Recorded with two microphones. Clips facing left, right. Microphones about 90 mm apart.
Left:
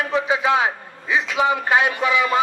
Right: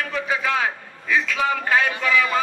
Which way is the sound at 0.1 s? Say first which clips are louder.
Left 6 dB; 20° left (ahead or behind).